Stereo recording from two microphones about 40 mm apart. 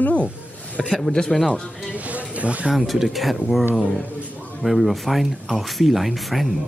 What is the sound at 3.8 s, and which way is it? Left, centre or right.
Speech, left.